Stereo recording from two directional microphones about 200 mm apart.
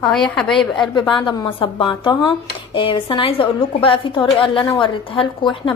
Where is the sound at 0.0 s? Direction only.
Centre (ahead or behind).